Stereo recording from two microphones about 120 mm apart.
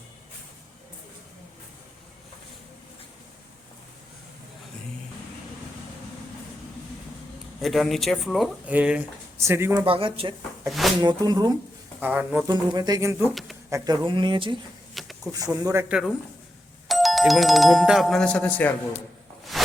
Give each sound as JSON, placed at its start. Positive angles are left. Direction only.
{"t": 7.6, "sound": "speech", "side_deg": 0}
{"t": 8.6, "sound": "speech", "side_deg": -10}
{"t": 9.8, "sound": "speech", "side_deg": -50}
{"t": 10.7, "sound": "speech", "side_deg": 0}
{"t": 11.0, "sound": "speech", "side_deg": -35}
{"t": 11.9, "sound": "speech", "side_deg": -15}
{"t": 12.5, "sound": "speech", "side_deg": -35}
{"t": 14.9, "sound": "a sound", "side_deg": 0}
{"t": 15.6, "sound": "speech", "side_deg": -20}
{"t": 15.9, "sound": "speech", "side_deg": -5}
{"t": 19.5, "sound": "a sound", "side_deg": 0}